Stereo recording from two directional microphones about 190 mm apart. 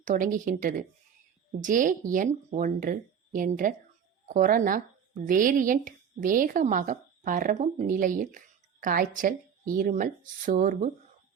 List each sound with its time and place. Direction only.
0.0 s a woman's voice: 45° right (ahead or behind)